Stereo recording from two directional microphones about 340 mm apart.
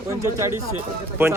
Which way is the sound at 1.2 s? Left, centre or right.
Centre.